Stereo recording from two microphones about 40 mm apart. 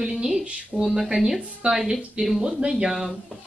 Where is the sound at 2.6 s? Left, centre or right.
Right.